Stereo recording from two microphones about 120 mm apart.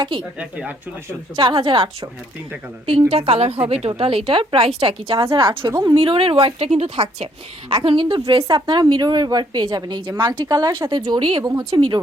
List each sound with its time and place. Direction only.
0.3 s speech: 10° right (ahead or behind)
1.4 s a woman's voice: 40° right (ahead or behind)
3.1 s a woman's voice: 55° right (ahead or behind)
5.1 s a woman's voice: 25° right (ahead or behind)
5.4 s a woman's voice: 40° right (ahead or behind)